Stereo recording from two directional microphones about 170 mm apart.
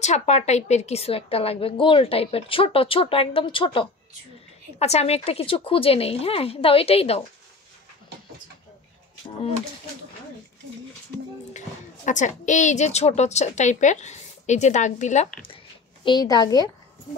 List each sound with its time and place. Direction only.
0.0 s a woman's voice: 40° left (ahead or behind)
11.5 s a woman's voice: 45° left (ahead or behind)
15.4 s speech: 30° left (ahead or behind)